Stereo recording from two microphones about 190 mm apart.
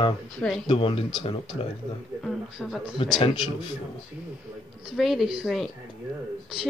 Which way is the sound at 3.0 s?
30° left (ahead or behind).